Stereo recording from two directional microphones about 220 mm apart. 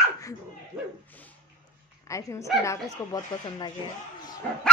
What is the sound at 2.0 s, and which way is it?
Speech, 15° left (ahead or behind).